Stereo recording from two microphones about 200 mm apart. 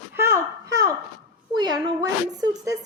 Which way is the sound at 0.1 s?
15° right (ahead or behind).